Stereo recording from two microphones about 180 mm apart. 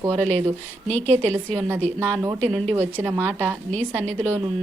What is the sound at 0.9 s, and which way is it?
Speech, 10° left (ahead or behind).